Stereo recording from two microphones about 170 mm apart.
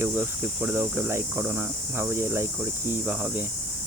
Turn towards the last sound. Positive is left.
turn(degrees=-10)  # may be behind; listen again after turning